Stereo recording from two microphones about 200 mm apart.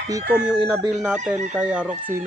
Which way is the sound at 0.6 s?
5° right (ahead or behind).